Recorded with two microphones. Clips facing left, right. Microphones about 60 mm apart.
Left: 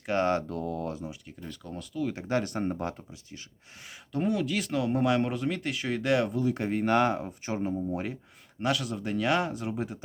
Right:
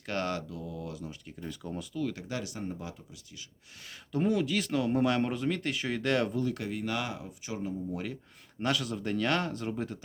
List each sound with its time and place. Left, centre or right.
0.0 s speech: left
0.4 s speech: left
1.4 s speech: centre
2.1 s speech: left
4.1 s speech: centre
6.5 s speech: left
7.9 s speech: left
8.6 s speech: centre